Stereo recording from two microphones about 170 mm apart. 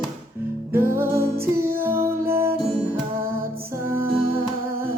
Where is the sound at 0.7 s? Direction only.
15° right (ahead or behind).